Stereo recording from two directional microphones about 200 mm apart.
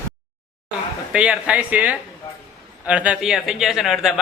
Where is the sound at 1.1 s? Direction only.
5° right (ahead or behind).